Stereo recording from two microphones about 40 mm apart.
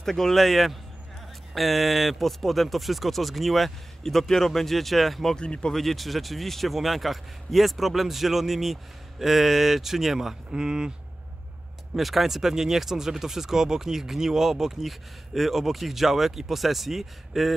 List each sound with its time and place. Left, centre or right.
0.0 s speech: centre
5.3 s speech: left
5.7 s speech: centre
10.5 s speech: centre
11.9 s speech: centre